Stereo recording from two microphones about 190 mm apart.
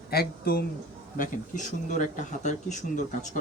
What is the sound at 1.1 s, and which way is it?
Speech, 45° left (ahead or behind).